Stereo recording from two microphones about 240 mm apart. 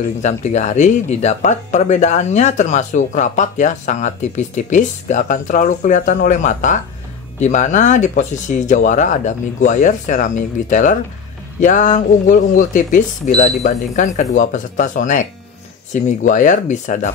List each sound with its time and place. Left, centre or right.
0.2 s speech: left